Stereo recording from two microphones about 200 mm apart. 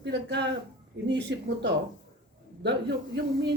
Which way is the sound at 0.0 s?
60° right (ahead or behind).